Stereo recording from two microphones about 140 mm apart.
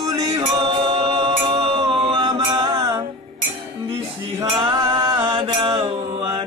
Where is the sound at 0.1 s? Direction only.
25° right (ahead or behind).